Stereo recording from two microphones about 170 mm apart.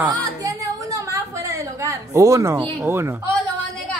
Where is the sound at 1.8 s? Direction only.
20° right (ahead or behind).